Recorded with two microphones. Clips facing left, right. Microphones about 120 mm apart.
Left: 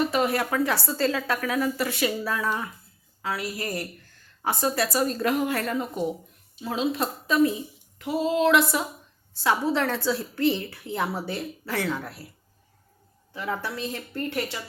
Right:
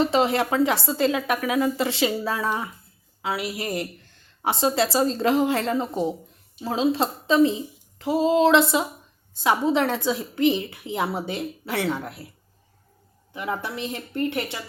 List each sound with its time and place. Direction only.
0.0 s a woman's voice: 25° right (ahead or behind)
13.3 s a woman's voice: 15° right (ahead or behind)